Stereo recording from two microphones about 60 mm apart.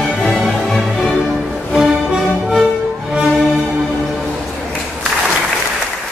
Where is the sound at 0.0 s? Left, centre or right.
Centre.